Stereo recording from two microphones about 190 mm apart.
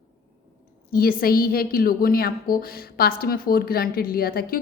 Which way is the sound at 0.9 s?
50° left (ahead or behind).